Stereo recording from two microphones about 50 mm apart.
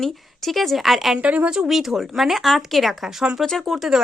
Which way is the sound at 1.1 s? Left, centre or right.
Right.